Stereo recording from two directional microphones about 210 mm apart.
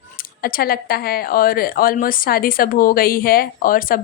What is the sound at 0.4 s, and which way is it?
Speech, 45° left (ahead or behind).